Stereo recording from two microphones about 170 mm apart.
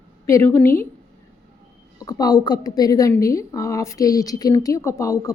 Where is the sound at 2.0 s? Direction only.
20° left (ahead or behind).